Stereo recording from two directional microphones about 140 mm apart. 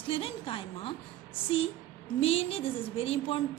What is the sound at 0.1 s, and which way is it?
Speech, 40° left (ahead or behind).